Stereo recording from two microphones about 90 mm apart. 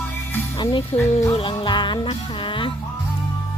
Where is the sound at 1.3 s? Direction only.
85° left.